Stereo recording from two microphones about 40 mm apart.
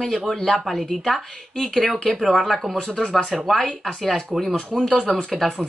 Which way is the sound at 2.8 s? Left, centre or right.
Left.